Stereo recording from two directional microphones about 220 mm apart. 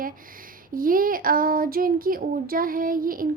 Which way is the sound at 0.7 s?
40° right (ahead or behind).